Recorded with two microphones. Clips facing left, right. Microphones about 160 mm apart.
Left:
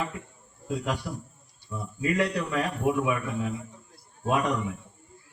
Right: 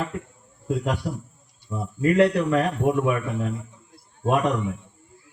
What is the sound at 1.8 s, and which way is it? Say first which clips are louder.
A man's voice: right 8 dB; 50° right (ahead or behind).